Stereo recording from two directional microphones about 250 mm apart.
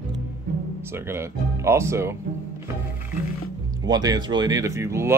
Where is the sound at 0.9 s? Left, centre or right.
Centre.